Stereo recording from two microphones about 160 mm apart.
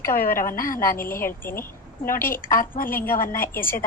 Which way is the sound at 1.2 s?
15° left (ahead or behind).